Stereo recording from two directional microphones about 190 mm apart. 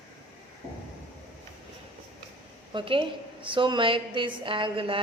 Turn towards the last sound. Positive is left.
turn(degrees=-25)  # may be behind; listen again after turning